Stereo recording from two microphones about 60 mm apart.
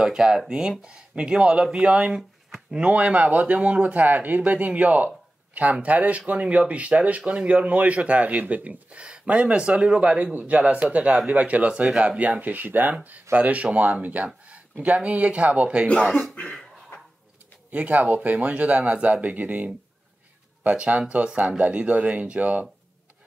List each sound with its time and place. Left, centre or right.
0.0 s speech: centre
2.7 s speech: right
17.6 s speech: right